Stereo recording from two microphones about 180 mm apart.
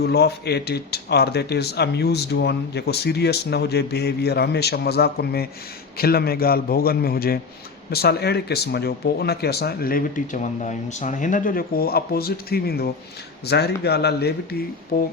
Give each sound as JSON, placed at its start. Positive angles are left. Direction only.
{"t": 0.0, "sound": "speech", "side_deg": 65}